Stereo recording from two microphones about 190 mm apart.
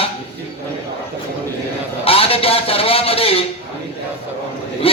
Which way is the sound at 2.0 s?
30° left (ahead or behind).